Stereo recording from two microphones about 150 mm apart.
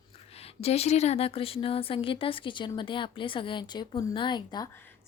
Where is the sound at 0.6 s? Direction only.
45° left (ahead or behind).